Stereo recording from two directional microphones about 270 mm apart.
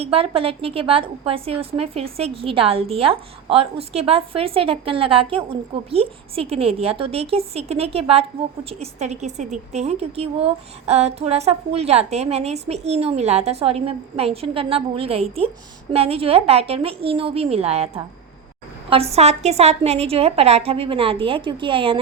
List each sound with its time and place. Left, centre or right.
0.0 s a woman's voice: right